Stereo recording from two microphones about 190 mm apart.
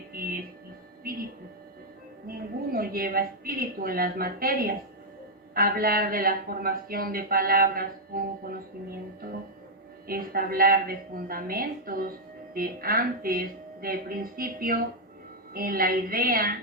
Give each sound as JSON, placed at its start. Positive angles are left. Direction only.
{"t": 0.1, "sound": "music", "side_deg": -50}
{"t": 1.1, "sound": "speech", "side_deg": -50}
{"t": 2.2, "sound": "a woman's voice", "side_deg": -50}